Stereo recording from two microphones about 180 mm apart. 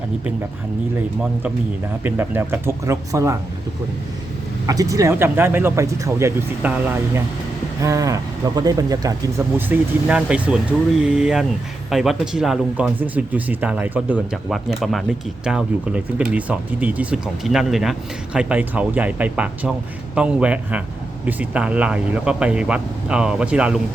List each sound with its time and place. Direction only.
2.0 s speech: 10° right (ahead or behind)
4.6 s speech: 20° right (ahead or behind)